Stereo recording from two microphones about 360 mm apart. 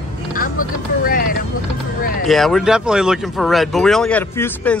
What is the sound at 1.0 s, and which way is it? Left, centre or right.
Vehicle, left.